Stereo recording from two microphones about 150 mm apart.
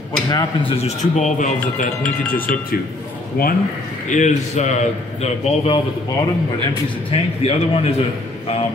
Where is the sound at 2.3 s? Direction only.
70° left (ahead or behind).